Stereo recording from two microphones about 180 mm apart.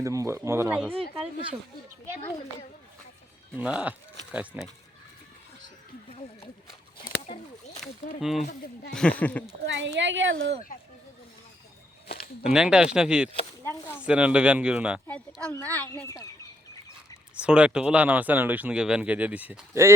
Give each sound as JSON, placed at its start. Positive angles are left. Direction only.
{"t": 0.0, "sound": "speech", "side_deg": -15}
{"t": 0.9, "sound": "speech", "side_deg": -30}
{"t": 3.6, "sound": "speech", "side_deg": -5}
{"t": 7.0, "sound": "a sound", "side_deg": 25}
{"t": 7.8, "sound": "speech", "side_deg": 0}
{"t": 9.6, "sound": "a woman's voice", "side_deg": -90}
{"t": 12.0, "sound": "a sound", "side_deg": 55}
{"t": 12.4, "sound": "speech", "side_deg": -5}
{"t": 13.7, "sound": "speech", "side_deg": 10}
{"t": 14.0, "sound": "speech", "side_deg": -5}
{"t": 15.4, "sound": "speech", "side_deg": 10}
{"t": 17.3, "sound": "speech", "side_deg": -5}